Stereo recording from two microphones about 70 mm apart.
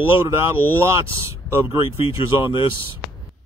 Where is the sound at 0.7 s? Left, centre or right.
Right.